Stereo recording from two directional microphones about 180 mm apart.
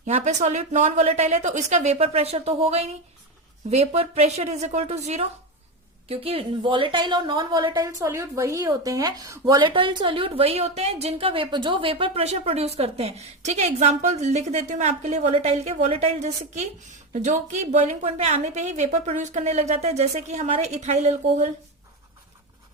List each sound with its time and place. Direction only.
0.0 s a woman's voice: 40° right (ahead or behind)